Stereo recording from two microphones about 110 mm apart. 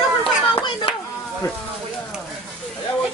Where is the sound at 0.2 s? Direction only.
55° left (ahead or behind).